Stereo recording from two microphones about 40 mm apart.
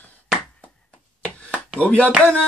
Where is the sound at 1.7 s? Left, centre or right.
Left.